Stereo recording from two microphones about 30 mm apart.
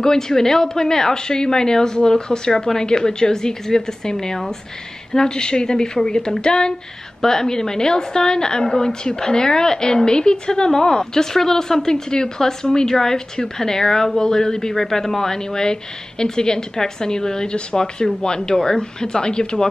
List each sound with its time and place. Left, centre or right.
0.0 s speech: centre
8.6 s a woman's voice: centre